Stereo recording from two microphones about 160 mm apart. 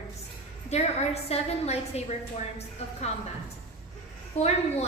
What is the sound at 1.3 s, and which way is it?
Speech, 40° left (ahead or behind).